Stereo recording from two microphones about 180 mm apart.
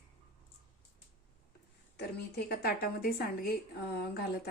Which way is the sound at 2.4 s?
60° left (ahead or behind).